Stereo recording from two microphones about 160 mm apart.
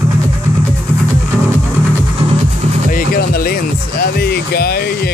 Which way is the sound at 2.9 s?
65° left (ahead or behind).